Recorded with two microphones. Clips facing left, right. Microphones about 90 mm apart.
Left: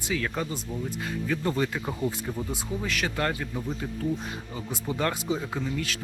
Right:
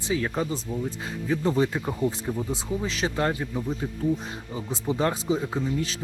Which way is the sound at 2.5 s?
30° right (ahead or behind).